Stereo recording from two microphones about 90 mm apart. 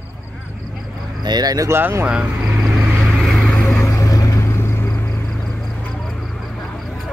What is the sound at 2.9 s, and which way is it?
Vehicle, centre (ahead or behind).